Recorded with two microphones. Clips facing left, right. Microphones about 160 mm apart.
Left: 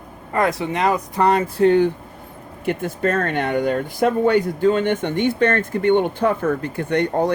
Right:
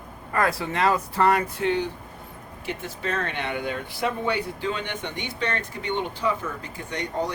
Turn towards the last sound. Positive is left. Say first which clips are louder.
# left 10 dB
turn(degrees=55)  # may be behind; listen again after turning